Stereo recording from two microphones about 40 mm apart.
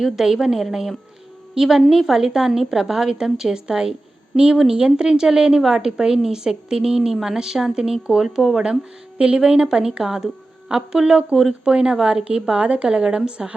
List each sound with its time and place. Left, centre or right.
0.0 s a woman's voice: centre
8.4 s a woman's voice: centre
8.6 s a woman's voice: right